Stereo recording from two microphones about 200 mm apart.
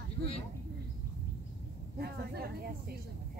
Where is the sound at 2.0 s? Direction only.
50° right (ahead or behind).